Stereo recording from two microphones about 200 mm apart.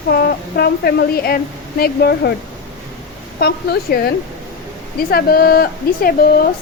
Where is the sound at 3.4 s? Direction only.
50° left (ahead or behind).